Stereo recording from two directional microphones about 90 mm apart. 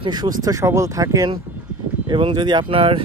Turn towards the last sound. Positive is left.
turn(degrees=-85)